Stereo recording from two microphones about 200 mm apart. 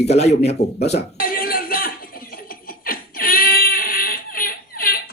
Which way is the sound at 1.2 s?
45° left (ahead or behind).